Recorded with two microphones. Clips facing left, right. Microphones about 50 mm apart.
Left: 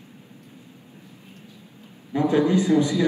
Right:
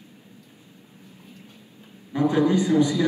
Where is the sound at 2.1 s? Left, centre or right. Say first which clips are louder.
Left 1 dB; left.